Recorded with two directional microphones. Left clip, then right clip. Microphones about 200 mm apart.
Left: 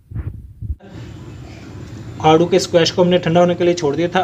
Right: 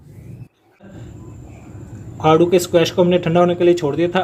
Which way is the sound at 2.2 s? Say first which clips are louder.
Left 1 dB; 15° right (ahead or behind).